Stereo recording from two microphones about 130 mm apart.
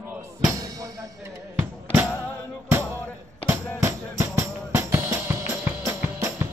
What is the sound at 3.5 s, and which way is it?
Music, 20° right (ahead or behind).